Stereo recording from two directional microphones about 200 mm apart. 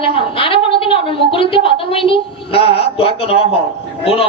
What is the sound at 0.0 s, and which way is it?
A woman's voice, 25° left (ahead or behind).